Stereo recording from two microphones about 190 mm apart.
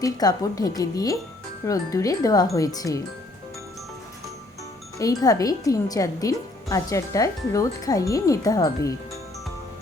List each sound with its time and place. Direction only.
0.0 s speech: 20° left (ahead or behind)
4.9 s speech: 20° left (ahead or behind)